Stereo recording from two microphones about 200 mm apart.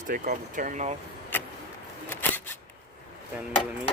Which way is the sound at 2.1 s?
10° left (ahead or behind).